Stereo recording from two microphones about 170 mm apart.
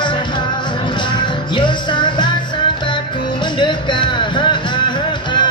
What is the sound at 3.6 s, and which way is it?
Music, 30° left (ahead or behind).